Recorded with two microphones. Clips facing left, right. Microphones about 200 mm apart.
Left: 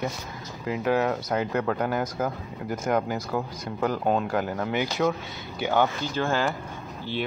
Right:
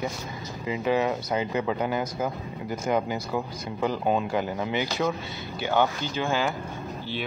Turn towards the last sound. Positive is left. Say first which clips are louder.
# left 1 dB
turn(degrees=-10)  # may be behind; listen again after turning